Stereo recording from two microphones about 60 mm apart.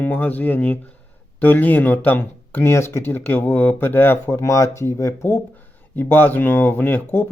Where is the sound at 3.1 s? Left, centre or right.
Left.